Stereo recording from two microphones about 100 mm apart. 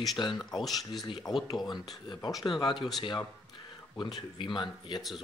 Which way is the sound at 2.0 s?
45° left (ahead or behind).